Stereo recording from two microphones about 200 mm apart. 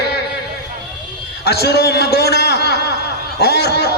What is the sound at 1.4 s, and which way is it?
Speech, 55° left (ahead or behind).